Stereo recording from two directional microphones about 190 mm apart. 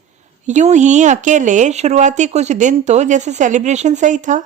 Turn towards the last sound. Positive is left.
turn(degrees=-40)  # may be behind; listen again after turning